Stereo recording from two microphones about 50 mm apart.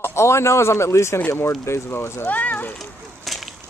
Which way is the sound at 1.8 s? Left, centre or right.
Left.